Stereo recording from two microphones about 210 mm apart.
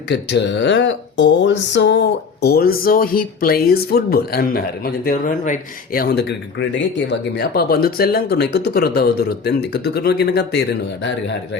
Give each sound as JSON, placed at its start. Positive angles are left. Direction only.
{"t": 0.1, "sound": "speech", "side_deg": 55}